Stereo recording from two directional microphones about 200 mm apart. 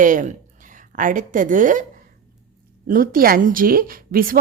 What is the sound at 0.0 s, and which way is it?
A woman's voice, 40° right (ahead or behind).